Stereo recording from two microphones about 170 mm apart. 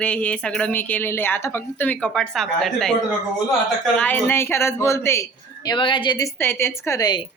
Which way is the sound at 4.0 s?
10° left (ahead or behind).